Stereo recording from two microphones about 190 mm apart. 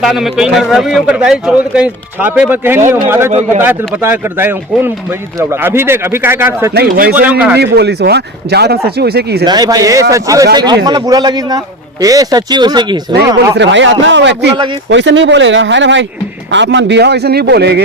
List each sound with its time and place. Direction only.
0.0 s a man's voice: centre (ahead or behind)
6.7 s speech: 50° right (ahead or behind)
7.1 s speech: 10° right (ahead or behind)
7.6 s speech: 60° right (ahead or behind)
9.4 s speech: 20° right (ahead or behind)
13.6 s speech: 70° right (ahead or behind)
14.5 s speech: 25° right (ahead or behind)
14.8 s speech: 75° right (ahead or behind)